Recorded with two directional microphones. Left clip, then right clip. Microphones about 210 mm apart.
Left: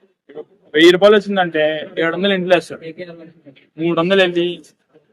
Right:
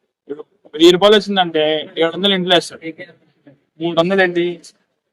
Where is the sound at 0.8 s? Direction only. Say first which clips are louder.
Even; 5° right (ahead or behind).